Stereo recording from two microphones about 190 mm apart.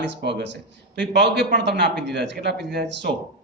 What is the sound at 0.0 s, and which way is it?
A man's voice, 65° right (ahead or behind).